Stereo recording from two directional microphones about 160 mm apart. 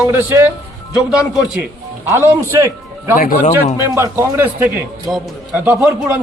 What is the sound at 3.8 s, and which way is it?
Speech, 20° right (ahead or behind).